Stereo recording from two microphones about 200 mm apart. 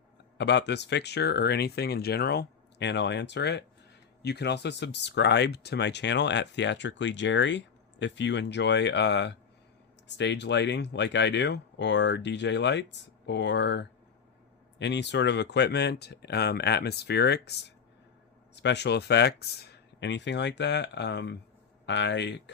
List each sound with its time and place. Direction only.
0.3 s speech: 60° left (ahead or behind)